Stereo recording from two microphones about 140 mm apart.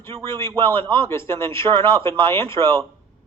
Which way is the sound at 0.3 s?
20° left (ahead or behind).